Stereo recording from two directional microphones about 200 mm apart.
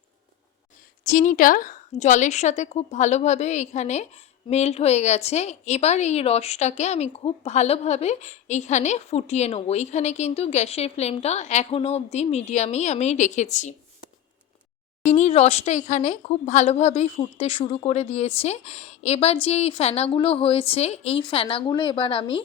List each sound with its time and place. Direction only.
1.0 s a woman's voice: 40° left (ahead or behind)
15.0 s a woman's voice: 35° left (ahead or behind)